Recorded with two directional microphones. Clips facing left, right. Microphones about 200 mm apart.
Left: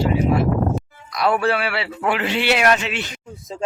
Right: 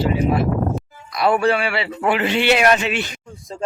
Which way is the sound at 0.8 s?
Centre (ahead or behind).